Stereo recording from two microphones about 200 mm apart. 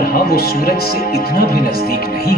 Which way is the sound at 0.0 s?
50° left (ahead or behind).